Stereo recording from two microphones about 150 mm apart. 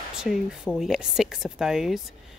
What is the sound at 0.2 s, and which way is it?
Speech, 5° right (ahead or behind).